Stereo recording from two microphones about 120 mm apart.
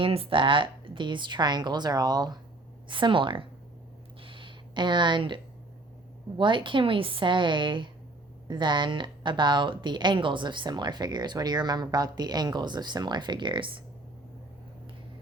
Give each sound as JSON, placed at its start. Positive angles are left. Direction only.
{"t": 0.0, "sound": "a woman's voice", "side_deg": -50}
{"t": 4.2, "sound": "a sound", "side_deg": -45}
{"t": 6.3, "sound": "a woman's voice", "side_deg": -45}